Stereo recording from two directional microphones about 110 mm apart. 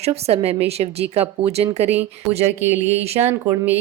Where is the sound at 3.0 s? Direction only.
70° right (ahead or behind).